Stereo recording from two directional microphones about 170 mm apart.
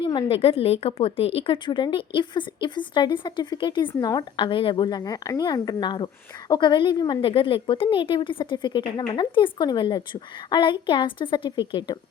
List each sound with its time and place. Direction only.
0.0 s a woman's voice: 25° left (ahead or behind)